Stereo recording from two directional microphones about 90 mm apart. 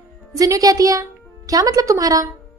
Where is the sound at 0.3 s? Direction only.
40° right (ahead or behind).